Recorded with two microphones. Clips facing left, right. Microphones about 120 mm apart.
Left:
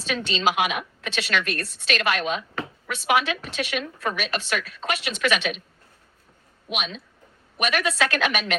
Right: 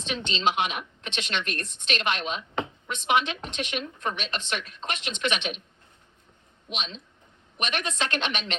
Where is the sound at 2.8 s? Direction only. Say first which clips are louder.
Left 3 dB; 90° left.